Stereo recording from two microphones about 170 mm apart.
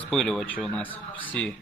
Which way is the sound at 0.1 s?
Centre (ahead or behind).